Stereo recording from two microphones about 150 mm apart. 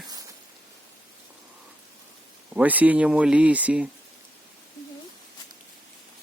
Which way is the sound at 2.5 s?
10° right (ahead or behind).